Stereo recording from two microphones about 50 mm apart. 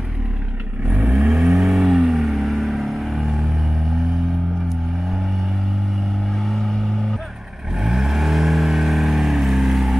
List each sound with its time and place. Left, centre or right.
0.8 s vehicle: right
1.3 s vehicle: centre
6.3 s vehicle: centre
7.7 s vehicle: centre